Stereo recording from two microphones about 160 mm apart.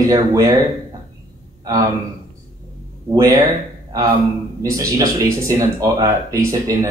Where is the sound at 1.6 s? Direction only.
25° right (ahead or behind).